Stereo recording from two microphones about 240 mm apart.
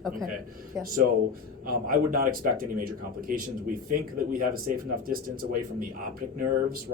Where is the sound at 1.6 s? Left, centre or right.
Right.